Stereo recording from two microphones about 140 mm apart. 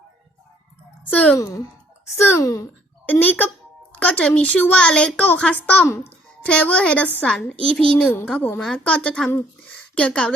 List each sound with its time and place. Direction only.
1.0 s a woman's voice: 10° left (ahead or behind)
1.4 s a child's voice: 25° left (ahead or behind); by 10.3 s 5° left (ahead or behind)